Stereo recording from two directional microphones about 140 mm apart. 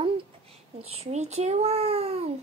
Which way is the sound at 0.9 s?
50° right (ahead or behind).